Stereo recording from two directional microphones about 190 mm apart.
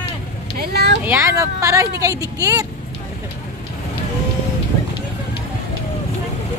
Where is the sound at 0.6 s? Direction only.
60° right (ahead or behind).